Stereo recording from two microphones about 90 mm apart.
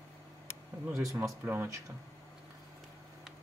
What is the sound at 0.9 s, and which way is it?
Speech, 35° right (ahead or behind).